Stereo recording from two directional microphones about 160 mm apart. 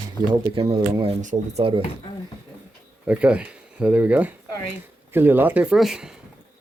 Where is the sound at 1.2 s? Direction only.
50° right (ahead or behind).